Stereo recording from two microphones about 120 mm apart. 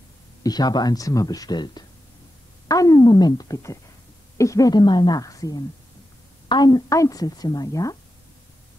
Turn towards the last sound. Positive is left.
turn(degrees=30)  # may be behind; listen again after turning